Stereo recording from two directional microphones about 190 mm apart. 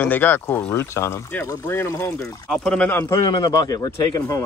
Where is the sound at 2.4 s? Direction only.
5° left (ahead or behind).